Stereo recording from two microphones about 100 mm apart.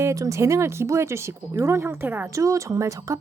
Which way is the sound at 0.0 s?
30° right (ahead or behind).